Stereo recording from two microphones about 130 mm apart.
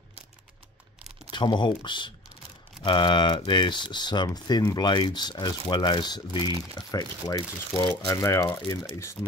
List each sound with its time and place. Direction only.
1.3 s speech: 35° left (ahead or behind)